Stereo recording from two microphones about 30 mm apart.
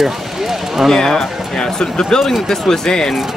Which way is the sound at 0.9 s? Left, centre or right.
Centre.